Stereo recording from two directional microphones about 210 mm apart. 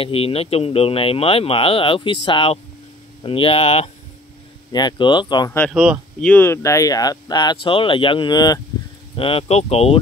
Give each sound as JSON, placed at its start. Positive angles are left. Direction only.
{"t": 0.0, "sound": "speech", "side_deg": 25}
{"t": 5.7, "sound": "speech", "side_deg": 0}
{"t": 6.3, "sound": "speech", "side_deg": 10}